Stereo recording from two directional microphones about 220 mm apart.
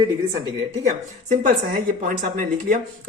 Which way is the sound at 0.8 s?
35° right (ahead or behind).